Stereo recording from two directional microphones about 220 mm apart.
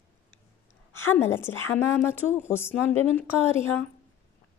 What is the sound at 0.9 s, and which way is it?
A woman's voice, 10° left (ahead or behind).